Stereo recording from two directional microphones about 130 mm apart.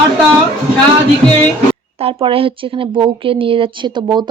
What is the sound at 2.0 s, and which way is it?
A woman's voice, 45° right (ahead or behind).